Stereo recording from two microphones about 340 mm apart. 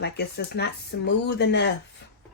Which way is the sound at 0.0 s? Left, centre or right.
Left.